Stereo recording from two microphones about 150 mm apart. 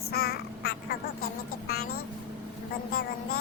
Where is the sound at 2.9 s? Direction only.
90° left.